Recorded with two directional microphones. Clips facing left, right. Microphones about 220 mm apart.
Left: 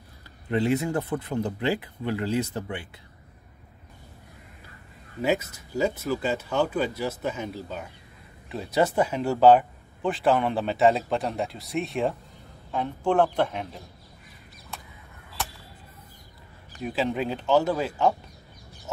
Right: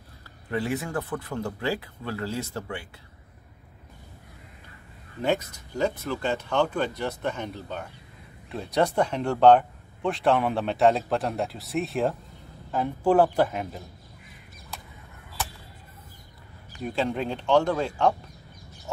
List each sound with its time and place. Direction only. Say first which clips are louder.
0.5 s speech: left 5 dB; 20° left (ahead or behind)
5.2 s speech: left 1 dB; 5° left (ahead or behind)
16.8 s speech: left 1 dB; 5° left (ahead or behind)